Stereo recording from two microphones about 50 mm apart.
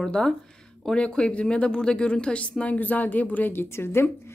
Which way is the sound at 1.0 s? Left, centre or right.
Centre.